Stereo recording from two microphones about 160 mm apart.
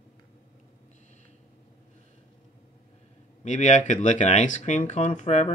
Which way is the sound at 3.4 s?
45° left (ahead or behind).